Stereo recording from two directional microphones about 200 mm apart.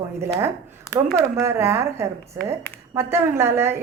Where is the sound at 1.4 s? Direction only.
15° right (ahead or behind).